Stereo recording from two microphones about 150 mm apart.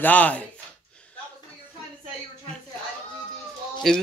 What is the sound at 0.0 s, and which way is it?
Speech, 10° left (ahead or behind).